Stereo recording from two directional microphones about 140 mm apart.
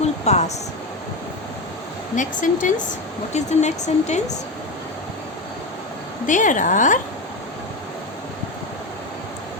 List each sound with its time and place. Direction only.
0.0 s a sound: 50° left (ahead or behind)
2.1 s speech: 65° left (ahead or behind)
3.3 s speech: 55° left (ahead or behind)
6.2 s speech: 65° left (ahead or behind)